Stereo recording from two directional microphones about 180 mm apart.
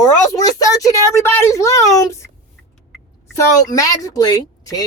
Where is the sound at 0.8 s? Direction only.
15° left (ahead or behind).